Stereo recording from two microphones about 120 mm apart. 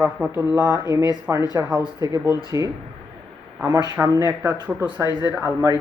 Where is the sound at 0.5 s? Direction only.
30° right (ahead or behind).